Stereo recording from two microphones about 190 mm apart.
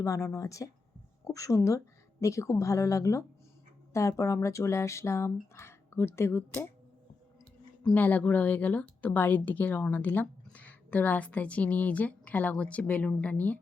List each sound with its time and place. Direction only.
0.0 s speech: 15° left (ahead or behind)
7.9 s speech: 10° left (ahead or behind)